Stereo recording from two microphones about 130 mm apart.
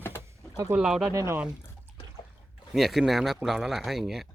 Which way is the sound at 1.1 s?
25° right (ahead or behind).